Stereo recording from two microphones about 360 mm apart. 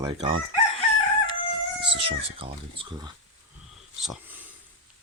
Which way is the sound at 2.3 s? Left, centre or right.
Centre.